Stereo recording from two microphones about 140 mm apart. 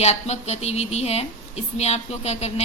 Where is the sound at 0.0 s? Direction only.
50° left (ahead or behind).